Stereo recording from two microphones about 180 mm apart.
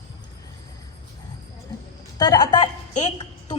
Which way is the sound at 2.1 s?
20° left (ahead or behind).